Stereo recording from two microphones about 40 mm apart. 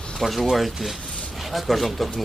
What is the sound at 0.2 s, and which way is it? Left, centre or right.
Speech, centre.